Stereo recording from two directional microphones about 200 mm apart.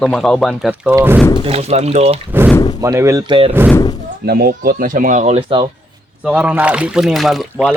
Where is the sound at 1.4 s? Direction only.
30° right (ahead or behind).